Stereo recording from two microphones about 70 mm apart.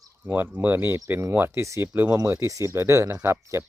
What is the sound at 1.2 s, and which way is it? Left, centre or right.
Speech, right.